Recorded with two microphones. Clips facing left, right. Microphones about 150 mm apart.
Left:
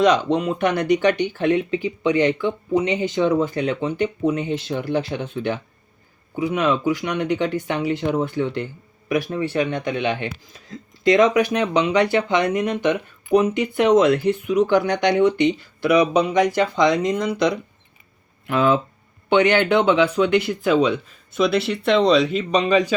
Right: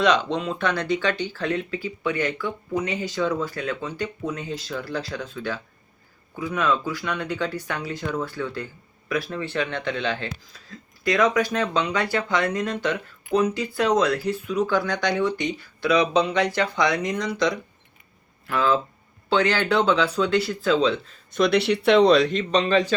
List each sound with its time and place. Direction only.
0.3 s speech: 15° left (ahead or behind)
18.4 s speech: 20° left (ahead or behind)
21.3 s speech: centre (ahead or behind)